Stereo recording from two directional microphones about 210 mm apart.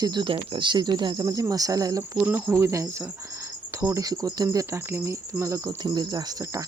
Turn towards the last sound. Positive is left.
turn(degrees=-15)  # may be behind; listen again after turning